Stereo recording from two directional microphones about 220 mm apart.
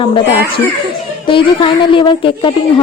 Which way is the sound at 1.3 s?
20° left (ahead or behind).